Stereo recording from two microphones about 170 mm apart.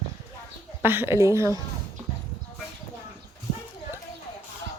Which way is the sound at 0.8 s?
10° right (ahead or behind).